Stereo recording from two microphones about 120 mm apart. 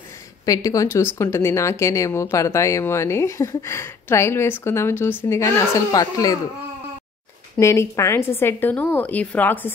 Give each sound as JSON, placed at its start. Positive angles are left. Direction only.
{"t": 0.5, "sound": "speech", "side_deg": 30}
{"t": 7.5, "sound": "speech", "side_deg": 25}